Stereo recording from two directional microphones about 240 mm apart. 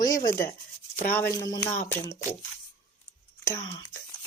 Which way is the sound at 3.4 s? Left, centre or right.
Centre.